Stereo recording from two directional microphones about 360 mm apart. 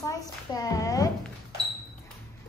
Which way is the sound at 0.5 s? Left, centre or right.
Centre.